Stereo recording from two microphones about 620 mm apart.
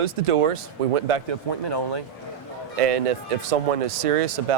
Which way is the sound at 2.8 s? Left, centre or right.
Right.